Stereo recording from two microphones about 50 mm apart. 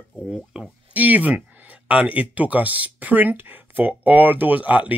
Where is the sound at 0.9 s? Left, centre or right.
Right.